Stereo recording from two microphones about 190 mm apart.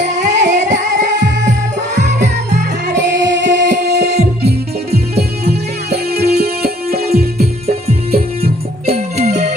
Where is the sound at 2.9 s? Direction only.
70° right (ahead or behind); by 7.0 s 55° right (ahead or behind).